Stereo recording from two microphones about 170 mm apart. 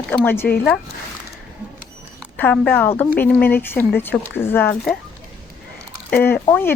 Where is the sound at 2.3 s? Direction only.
10° left (ahead or behind).